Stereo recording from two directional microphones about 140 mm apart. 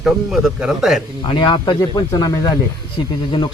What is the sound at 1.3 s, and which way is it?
Speech, 35° left (ahead or behind).